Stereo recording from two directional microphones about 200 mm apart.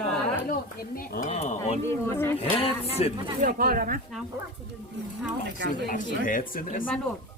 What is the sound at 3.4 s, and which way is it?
Speech, 45° right (ahead or behind).